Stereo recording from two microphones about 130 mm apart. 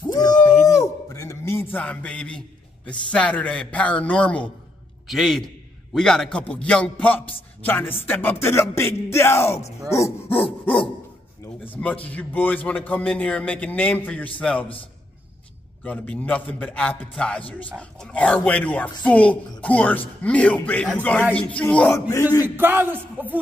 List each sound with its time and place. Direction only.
0.0 s a sound: 30° left (ahead or behind); by 2.4 s 10° left (ahead or behind)
2.9 s a man's voice: 10° left (ahead or behind)
15.8 s a man's voice: 10° left (ahead or behind)
22.6 s speech: 15° right (ahead or behind)